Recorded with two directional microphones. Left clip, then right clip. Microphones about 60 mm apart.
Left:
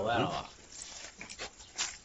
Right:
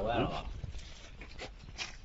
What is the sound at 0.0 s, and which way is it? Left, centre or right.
Speech, left.